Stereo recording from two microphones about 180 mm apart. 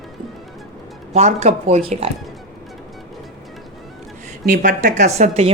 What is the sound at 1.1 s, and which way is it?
Speech, 35° right (ahead or behind).